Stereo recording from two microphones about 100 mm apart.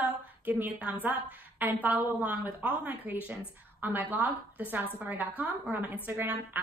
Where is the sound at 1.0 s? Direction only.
20° right (ahead or behind).